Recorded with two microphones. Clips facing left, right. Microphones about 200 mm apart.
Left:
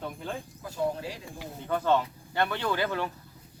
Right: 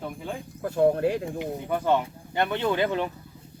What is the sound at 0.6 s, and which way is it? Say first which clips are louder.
Speech: right 11 dB; 60° right (ahead or behind).